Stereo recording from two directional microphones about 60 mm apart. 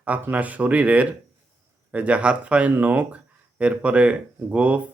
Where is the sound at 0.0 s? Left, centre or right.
Right.